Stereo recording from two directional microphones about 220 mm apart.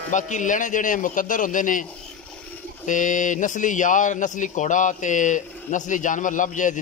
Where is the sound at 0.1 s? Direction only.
35° left (ahead or behind).